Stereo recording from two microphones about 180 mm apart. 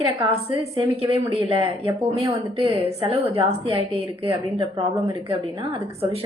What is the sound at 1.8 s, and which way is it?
A woman's voice, 30° right (ahead or behind).